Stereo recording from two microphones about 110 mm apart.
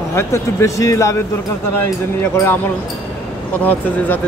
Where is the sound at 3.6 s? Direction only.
15° left (ahead or behind).